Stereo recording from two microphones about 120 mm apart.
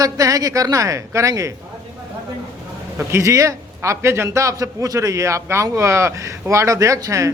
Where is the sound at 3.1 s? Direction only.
25° right (ahead or behind).